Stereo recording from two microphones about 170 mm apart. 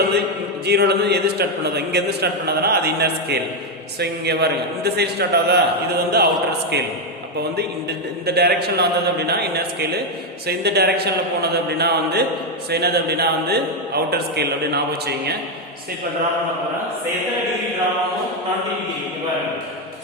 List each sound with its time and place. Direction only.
0.6 s a man's voice: 75° right (ahead or behind)